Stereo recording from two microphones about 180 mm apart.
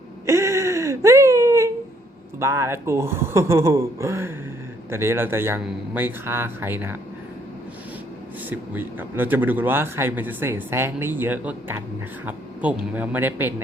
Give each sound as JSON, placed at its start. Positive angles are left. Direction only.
{"t": 0.3, "sound": "wail", "side_deg": -15}
{"t": 2.4, "sound": "a man's voice", "side_deg": -15}
{"t": 8.4, "sound": "a man's voice", "side_deg": -10}